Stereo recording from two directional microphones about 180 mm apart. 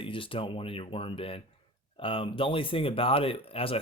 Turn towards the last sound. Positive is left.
turn(degrees=30)  # may be behind; listen again after turning